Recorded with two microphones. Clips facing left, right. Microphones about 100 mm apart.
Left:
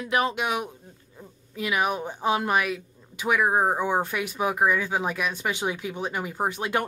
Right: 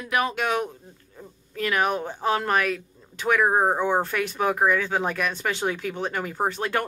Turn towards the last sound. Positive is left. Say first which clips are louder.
# right 1 dB
turn(degrees=15)  # may be behind; listen again after turning